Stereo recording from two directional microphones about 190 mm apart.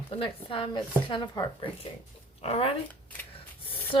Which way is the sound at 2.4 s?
30° left (ahead or behind).